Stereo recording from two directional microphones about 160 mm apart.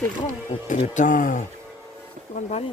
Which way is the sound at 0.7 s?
50° left (ahead or behind).